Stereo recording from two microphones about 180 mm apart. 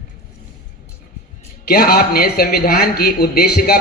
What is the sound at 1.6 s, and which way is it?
A woman's voice, 55° left (ahead or behind).